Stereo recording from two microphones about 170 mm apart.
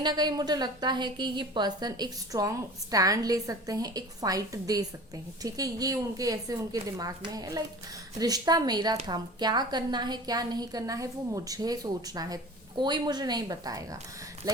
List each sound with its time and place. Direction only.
0.0 s a woman's voice: 25° right (ahead or behind)